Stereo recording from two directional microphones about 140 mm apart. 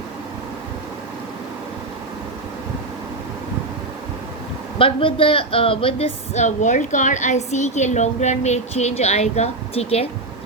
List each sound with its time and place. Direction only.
4.8 s speech: 40° left (ahead or behind)